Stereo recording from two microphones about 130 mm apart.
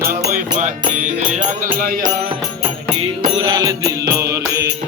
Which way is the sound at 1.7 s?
90° right.